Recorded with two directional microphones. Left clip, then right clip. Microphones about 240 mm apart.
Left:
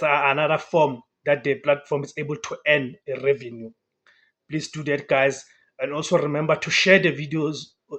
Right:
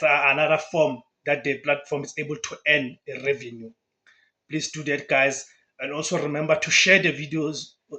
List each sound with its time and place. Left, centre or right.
0.0 s speech: centre
4.7 s speech: centre